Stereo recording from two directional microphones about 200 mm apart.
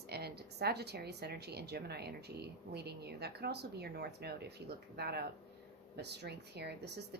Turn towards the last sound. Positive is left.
turn(degrees=-55)  # may be behind; listen again after turning